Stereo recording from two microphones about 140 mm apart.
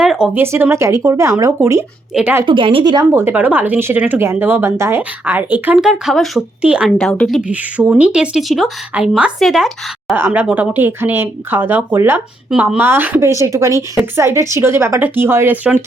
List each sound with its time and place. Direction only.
0.0 s speech: 5° right (ahead or behind)
0.4 s speech: 20° right (ahead or behind)
2.5 s a woman's voice: 40° right (ahead or behind)
3.1 s speech: 15° right (ahead or behind)
5.7 s speech: 5° right (ahead or behind)
7.0 s speech: 5° left (ahead or behind)
7.4 s speech: 10° right (ahead or behind)
10.2 s speech: 15° right (ahead or behind)